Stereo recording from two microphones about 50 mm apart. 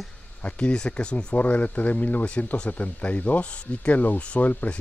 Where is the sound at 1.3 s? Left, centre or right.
Left.